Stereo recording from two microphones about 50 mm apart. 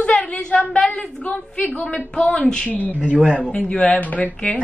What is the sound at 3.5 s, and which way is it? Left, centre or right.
A woman's voice, left.